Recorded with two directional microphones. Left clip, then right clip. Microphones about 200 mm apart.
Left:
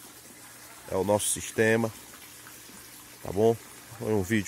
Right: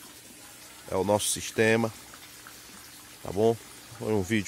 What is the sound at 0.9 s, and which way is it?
Speech, 10° right (ahead or behind).